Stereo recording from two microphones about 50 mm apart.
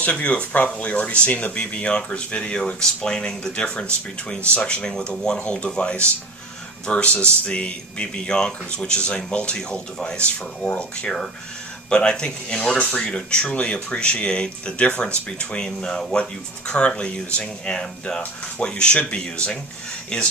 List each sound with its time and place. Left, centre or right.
0.0 s speech: left